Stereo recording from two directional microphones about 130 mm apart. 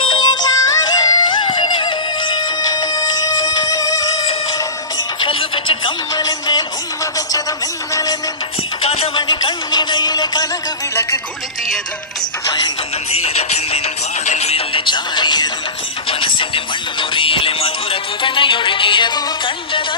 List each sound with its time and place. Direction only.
0.0 s music: 35° left (ahead or behind)
5.2 s music: 40° left (ahead or behind)
8.8 s music: 50° left (ahead or behind)
9.1 s music: 35° left (ahead or behind)
13.2 s music: 55° left (ahead or behind); by 19.2 s 35° left (ahead or behind)